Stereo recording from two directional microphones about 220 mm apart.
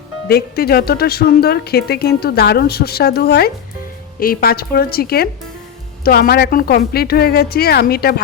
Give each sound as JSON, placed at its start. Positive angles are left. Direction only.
{"t": 0.3, "sound": "speech", "side_deg": 45}